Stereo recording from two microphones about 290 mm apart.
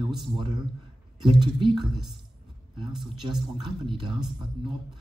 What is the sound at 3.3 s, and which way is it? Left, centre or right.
Speech, centre.